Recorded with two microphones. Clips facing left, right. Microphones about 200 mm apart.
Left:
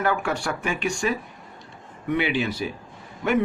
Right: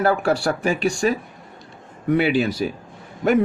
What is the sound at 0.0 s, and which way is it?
A man's voice, 35° right (ahead or behind).